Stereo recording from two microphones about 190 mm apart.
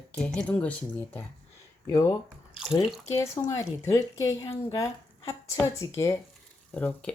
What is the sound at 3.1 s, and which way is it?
Speech, 15° left (ahead or behind).